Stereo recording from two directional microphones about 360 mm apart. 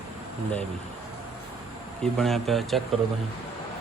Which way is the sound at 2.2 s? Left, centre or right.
Centre.